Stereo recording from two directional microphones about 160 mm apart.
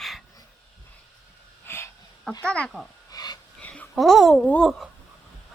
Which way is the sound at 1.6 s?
15° left (ahead or behind).